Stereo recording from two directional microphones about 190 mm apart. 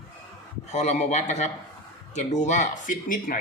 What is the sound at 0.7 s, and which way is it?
Speech, 35° left (ahead or behind).